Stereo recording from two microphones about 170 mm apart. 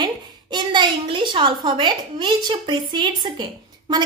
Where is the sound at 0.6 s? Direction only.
30° right (ahead or behind).